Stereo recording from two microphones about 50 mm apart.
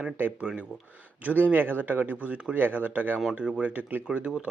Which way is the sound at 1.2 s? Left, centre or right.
Right.